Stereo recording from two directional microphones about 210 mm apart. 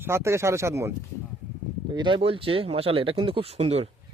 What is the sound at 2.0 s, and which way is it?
Speech, 25° right (ahead or behind).